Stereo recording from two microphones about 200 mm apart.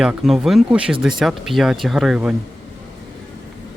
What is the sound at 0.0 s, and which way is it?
Speech, 5° right (ahead or behind).